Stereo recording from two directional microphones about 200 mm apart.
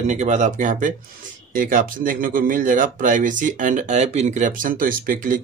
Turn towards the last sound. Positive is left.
turn(degrees=-45)  # may be behind; listen again after turning